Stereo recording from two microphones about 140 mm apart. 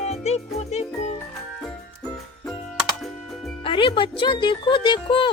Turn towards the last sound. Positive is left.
turn(degrees=35)  # may be behind; listen again after turning